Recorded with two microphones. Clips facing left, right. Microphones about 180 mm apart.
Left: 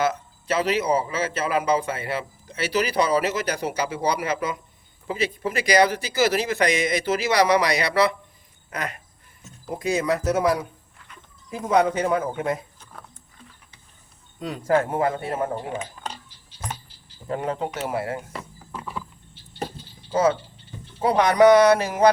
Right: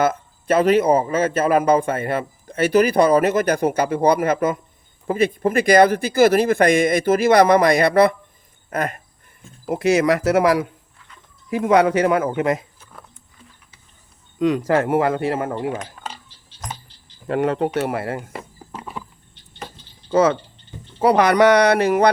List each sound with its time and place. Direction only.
0.0 s a man's voice: 50° right (ahead or behind)
9.4 s speech: 75° right (ahead or behind)
14.3 s speech: 90° right
17.2 s speech: 75° right (ahead or behind)
18.3 s a sound: 20° right (ahead or behind)
20.1 s speech: 75° right (ahead or behind)